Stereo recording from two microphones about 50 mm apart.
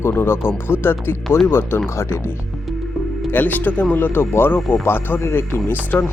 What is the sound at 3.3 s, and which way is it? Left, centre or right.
Speech, left.